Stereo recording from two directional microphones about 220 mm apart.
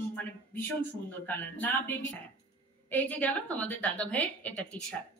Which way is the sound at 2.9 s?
5° left (ahead or behind).